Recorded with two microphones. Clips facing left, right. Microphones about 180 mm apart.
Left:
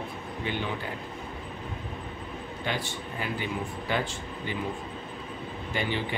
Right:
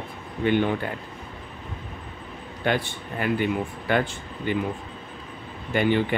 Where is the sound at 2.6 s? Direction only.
60° right (ahead or behind).